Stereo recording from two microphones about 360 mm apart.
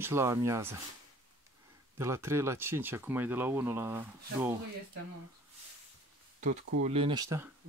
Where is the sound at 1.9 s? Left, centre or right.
Centre.